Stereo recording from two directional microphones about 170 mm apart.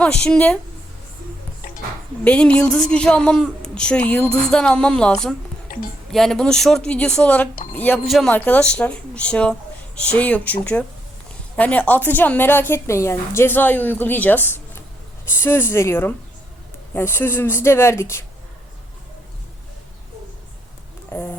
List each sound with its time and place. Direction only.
0.0 s a woman's voice: 5° left (ahead or behind)
2.2 s a woman's voice: 5° left (ahead or behind)
21.1 s speech: 10° left (ahead or behind)